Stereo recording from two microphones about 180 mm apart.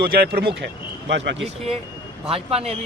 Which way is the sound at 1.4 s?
35° right (ahead or behind).